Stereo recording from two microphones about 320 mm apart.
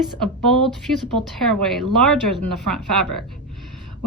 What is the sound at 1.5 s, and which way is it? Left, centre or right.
Speech, centre.